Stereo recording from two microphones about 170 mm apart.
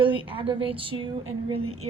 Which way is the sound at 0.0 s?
30° right (ahead or behind).